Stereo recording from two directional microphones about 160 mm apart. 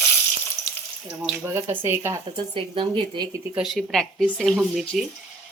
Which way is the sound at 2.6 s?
30° right (ahead or behind).